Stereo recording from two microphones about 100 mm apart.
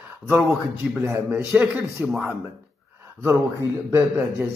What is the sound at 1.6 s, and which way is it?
Speech, 20° right (ahead or behind).